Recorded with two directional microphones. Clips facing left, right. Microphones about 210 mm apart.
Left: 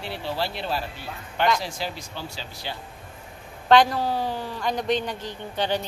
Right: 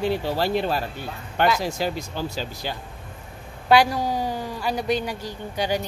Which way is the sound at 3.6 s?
10° right (ahead or behind).